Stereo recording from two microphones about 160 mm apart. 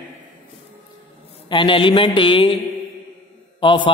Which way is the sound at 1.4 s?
30° left (ahead or behind).